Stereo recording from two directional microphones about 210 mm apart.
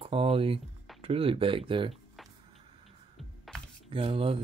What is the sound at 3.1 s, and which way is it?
Music, centre (ahead or behind).